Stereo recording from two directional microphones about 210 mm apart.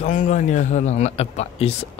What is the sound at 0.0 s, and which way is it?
A man's voice, 35° left (ahead or behind).